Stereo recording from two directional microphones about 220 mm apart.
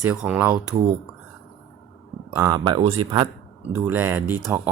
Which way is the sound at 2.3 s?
15° right (ahead or behind).